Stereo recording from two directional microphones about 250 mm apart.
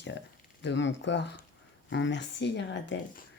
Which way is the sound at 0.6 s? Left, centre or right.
Left.